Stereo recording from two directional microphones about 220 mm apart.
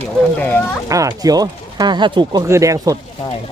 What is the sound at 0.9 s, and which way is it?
Speech, 15° right (ahead or behind).